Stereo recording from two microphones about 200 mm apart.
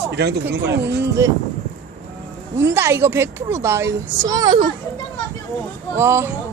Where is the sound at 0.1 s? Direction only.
55° right (ahead or behind).